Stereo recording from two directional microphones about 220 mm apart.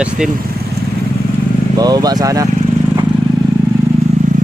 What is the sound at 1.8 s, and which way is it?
Speech, 15° right (ahead or behind).